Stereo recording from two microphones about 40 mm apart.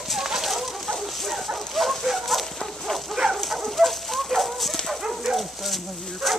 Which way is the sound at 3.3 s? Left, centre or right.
Centre.